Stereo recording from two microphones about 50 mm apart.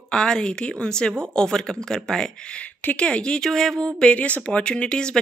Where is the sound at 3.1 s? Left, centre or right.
Centre.